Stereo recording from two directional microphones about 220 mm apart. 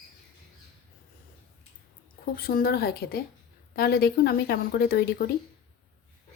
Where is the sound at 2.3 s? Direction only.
40° left (ahead or behind).